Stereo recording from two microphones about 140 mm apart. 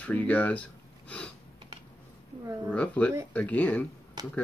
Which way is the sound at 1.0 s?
10° left (ahead or behind).